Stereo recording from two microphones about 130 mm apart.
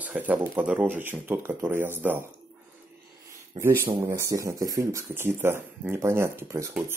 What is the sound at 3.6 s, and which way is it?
Speech, 15° right (ahead or behind).